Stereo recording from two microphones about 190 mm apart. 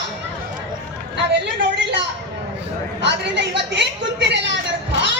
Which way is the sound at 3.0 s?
65° right (ahead or behind).